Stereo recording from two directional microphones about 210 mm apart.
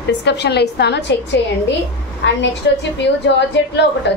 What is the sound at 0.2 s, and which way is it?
Speech, 55° left (ahead or behind).